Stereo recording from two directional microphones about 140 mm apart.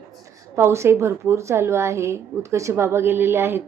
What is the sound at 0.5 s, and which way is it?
A woman's voice, 20° right (ahead or behind).